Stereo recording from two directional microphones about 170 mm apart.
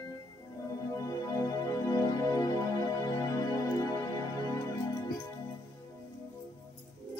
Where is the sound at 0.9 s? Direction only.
20° left (ahead or behind).